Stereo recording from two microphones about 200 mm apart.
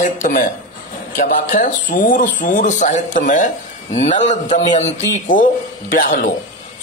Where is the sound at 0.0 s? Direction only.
40° left (ahead or behind).